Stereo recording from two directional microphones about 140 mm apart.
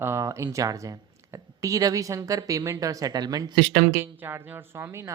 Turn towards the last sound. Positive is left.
turn(degrees=-20)  # may be behind; listen again after turning